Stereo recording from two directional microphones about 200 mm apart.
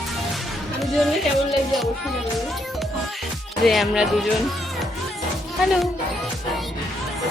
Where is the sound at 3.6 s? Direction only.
Centre (ahead or behind).